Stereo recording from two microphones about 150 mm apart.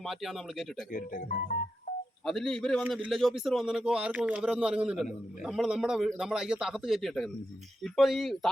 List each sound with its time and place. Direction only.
0.0 s a man's voice: centre (ahead or behind)
0.9 s speech: 60° left (ahead or behind)
2.2 s a man's voice: centre (ahead or behind)